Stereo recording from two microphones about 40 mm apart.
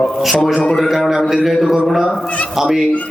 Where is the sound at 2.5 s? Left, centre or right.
Centre.